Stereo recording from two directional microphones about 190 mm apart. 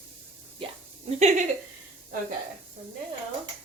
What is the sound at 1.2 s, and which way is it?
Speech, 35° right (ahead or behind).